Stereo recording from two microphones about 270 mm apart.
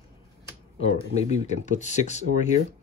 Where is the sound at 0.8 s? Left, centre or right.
Left.